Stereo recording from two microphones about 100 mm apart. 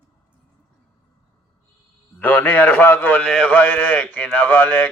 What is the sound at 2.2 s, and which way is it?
A man's voice, 20° left (ahead or behind).